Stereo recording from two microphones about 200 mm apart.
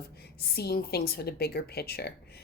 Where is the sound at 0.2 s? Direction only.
50° left (ahead or behind).